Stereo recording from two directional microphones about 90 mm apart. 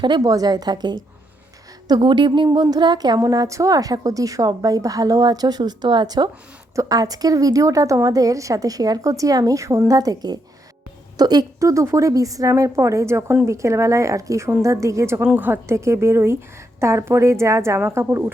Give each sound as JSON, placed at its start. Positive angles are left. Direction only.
{"t": 0.0, "sound": "a woman's voice", "side_deg": -50}
{"t": 2.0, "sound": "speech", "side_deg": -60}
{"t": 2.6, "sound": "a woman's voice", "side_deg": -50}
{"t": 3.2, "sound": "a woman's voice", "side_deg": -40}
{"t": 6.7, "sound": "a woman's voice", "side_deg": -45}